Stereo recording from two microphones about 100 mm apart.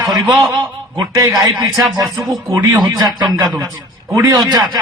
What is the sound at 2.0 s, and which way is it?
Speech, centre (ahead or behind).